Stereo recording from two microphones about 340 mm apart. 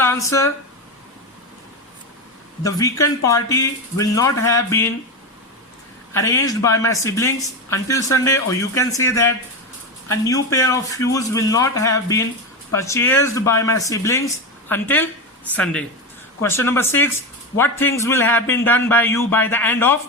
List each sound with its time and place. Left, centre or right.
0.0 s speech: centre
2.6 s a man's voice: centre
6.1 s a man's voice: centre